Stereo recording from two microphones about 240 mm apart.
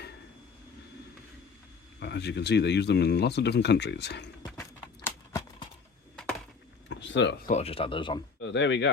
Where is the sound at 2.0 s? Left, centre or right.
Left.